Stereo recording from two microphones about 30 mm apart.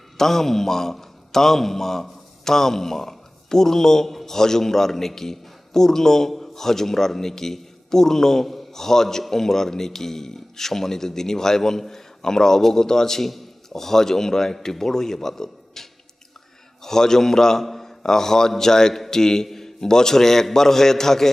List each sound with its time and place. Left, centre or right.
0.2 s a man's voice: centre